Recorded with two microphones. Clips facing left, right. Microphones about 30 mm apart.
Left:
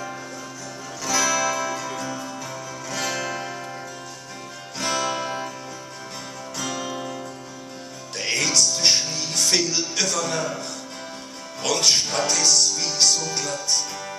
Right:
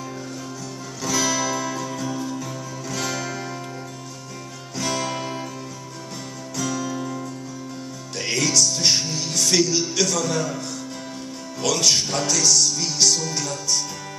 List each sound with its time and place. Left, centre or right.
1.0 s music: left
1.8 s music: left
2.9 s music: left
4.7 s music: left
6.5 s music: left
8.2 s music: left
9.6 s a man's voice: left
11.6 s a man's voice: left
12.8 s music: left